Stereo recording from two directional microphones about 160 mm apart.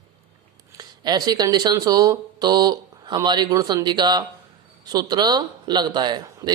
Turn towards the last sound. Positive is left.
turn(degrees=-25)  # may be behind; listen again after turning